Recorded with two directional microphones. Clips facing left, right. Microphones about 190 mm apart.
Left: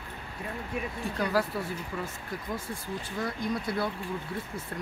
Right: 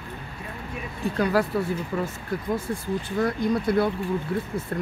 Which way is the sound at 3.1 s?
60° right (ahead or behind).